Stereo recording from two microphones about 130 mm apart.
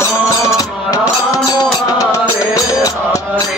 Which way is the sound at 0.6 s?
30° left (ahead or behind).